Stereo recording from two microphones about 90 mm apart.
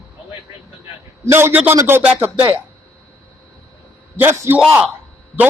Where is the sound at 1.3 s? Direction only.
25° right (ahead or behind).